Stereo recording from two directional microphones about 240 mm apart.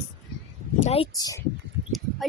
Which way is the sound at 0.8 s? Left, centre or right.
Left.